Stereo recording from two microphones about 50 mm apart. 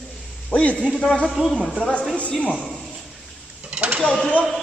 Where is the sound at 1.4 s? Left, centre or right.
Centre.